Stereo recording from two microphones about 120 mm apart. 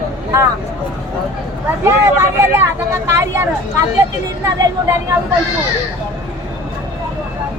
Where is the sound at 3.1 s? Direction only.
20° right (ahead or behind).